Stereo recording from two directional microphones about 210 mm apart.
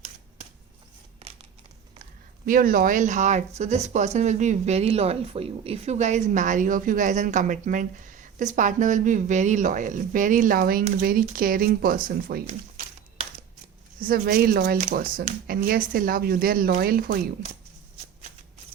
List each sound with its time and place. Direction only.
2.5 s speech: 40° right (ahead or behind)
14.0 s speech: 45° right (ahead or behind)